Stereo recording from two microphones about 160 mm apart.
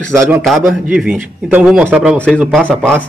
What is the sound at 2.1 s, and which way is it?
Speech, 5° left (ahead or behind).